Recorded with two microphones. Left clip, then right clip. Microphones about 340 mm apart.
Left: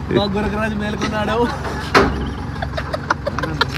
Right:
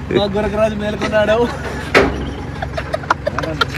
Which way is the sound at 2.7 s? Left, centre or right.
Centre.